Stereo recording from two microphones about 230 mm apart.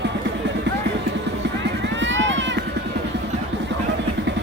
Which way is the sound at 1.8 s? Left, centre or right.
Right.